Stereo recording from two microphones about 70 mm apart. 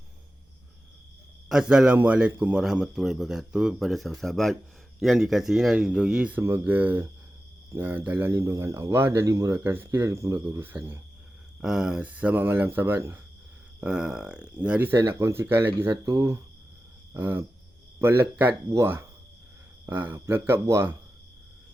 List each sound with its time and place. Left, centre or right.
1.5 s speech: centre
6.7 s speech: right
8.3 s speech: right
9.2 s speech: right
9.5 s speech: right
11.6 s speech: centre; by 13.1 s right
13.8 s speech: centre
14.8 s speech: right
17.2 s speech: right
19.9 s speech: right
20.3 s speech: right